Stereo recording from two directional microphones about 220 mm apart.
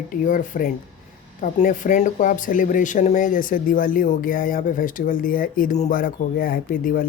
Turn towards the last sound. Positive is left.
turn(degrees=40)  # may be behind; listen again after turning